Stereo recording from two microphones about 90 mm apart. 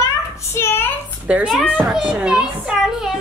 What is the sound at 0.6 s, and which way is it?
Speech, 25° left (ahead or behind).